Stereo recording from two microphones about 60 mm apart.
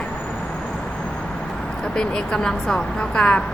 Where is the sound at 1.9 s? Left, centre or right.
Centre.